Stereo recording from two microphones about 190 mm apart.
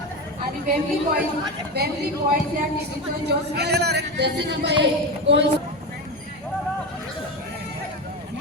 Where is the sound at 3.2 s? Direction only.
60° right (ahead or behind).